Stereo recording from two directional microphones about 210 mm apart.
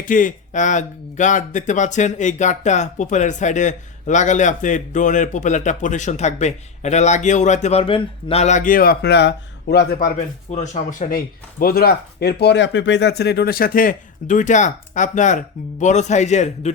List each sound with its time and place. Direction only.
0.0 s speech: 40° left (ahead or behind)